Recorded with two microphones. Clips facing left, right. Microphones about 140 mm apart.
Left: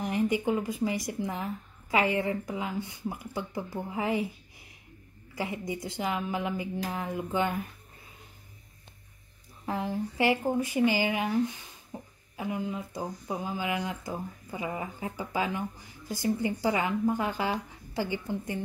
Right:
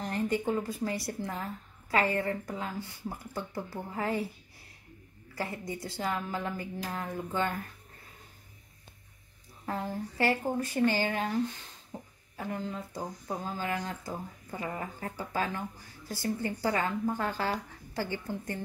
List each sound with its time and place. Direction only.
0.0 s speech: 15° left (ahead or behind)
9.7 s speech: 15° left (ahead or behind)